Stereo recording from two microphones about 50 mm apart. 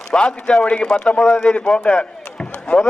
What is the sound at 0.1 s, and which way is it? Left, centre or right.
A man's voice, left.